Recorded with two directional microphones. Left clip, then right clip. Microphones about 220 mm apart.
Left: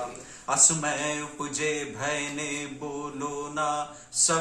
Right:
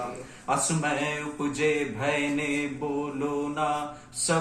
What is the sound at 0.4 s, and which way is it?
Music, 15° left (ahead or behind).